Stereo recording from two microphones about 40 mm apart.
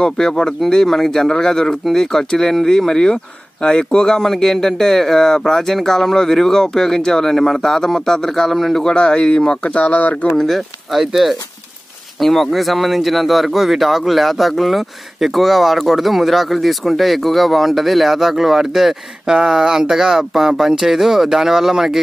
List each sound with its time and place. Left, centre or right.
0.0 s speech: centre
9.7 s speech: left
10.3 s speech: centre
12.2 s speech: centre